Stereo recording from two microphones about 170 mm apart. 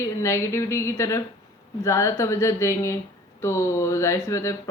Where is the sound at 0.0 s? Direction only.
15° left (ahead or behind).